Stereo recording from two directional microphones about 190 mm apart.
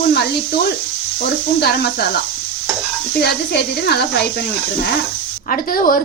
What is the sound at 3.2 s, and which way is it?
A woman's voice, 60° left (ahead or behind).